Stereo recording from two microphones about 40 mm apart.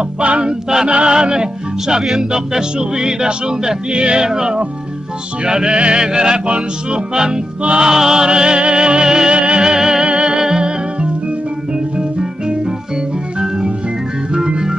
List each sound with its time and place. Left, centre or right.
0.2 s music: right
4.3 s music: centre
14.3 s music: centre